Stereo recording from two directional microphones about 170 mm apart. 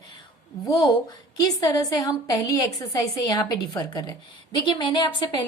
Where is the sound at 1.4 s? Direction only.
20° left (ahead or behind).